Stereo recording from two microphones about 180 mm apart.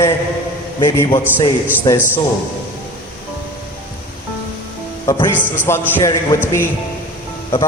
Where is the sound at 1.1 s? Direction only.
15° left (ahead or behind).